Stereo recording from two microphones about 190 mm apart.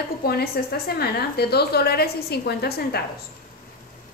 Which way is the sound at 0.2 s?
55° left (ahead or behind).